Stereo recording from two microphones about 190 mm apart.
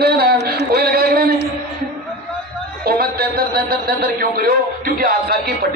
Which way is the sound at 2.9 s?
55° right (ahead or behind).